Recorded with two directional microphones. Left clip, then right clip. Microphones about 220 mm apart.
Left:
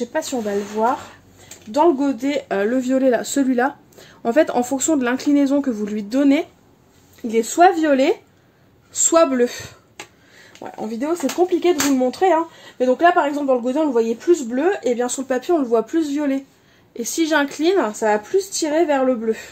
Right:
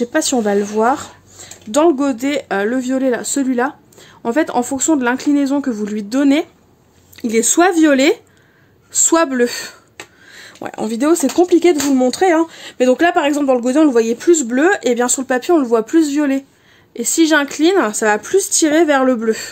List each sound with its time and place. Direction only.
0.1 s speech: 50° right (ahead or behind); by 6.4 s 20° right (ahead or behind)
7.2 s speech: 40° right (ahead or behind)